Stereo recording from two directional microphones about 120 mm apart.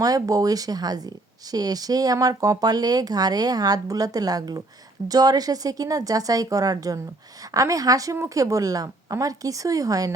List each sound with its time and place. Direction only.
0.0 s a woman's voice: 30° right (ahead or behind)